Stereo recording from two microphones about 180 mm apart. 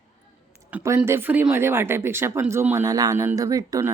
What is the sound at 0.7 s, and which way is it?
Speech, 15° right (ahead or behind).